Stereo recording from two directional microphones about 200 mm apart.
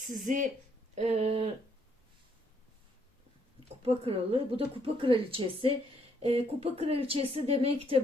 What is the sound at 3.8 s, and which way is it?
Speech, 30° right (ahead or behind).